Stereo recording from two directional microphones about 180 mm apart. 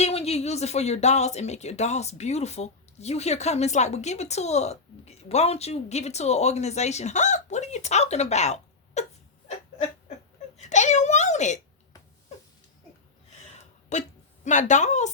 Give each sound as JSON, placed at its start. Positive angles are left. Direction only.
{"t": 0.0, "sound": "speech", "side_deg": 35}
{"t": 10.6, "sound": "speech", "side_deg": 40}
{"t": 13.9, "sound": "speech", "side_deg": 40}